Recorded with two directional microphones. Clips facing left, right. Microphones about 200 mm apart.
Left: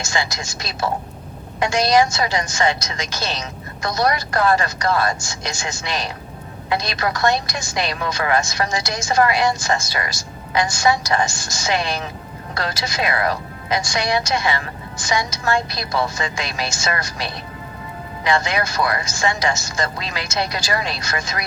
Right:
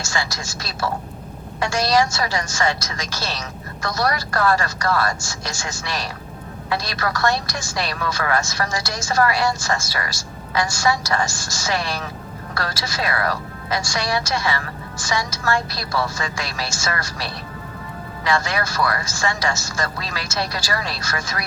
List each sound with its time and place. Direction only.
0.0 s a woman's voice: 20° left (ahead or behind)